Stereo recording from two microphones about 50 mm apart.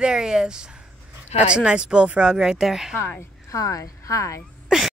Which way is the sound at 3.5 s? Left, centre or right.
Left.